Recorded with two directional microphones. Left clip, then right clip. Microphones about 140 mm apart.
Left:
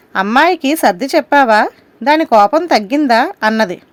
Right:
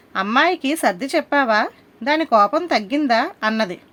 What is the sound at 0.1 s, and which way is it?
Speech, 55° left (ahead or behind).